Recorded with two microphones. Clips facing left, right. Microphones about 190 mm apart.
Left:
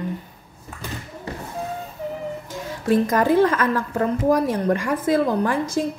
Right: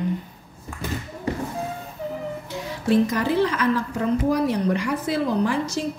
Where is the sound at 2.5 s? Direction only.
45° left (ahead or behind).